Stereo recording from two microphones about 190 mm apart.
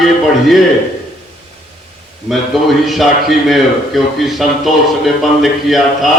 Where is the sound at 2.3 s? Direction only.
Centre (ahead or behind).